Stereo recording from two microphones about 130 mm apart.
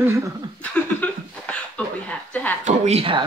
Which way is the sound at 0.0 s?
25° right (ahead or behind).